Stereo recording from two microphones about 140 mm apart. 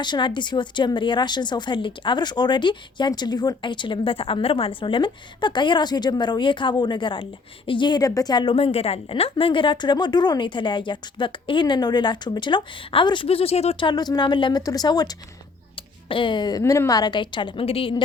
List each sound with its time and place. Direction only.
0.0 s a woman's voice: 35° left (ahead or behind)
8.5 s a woman's voice: 45° left (ahead or behind)
13.8 s a woman's voice: 30° left (ahead or behind)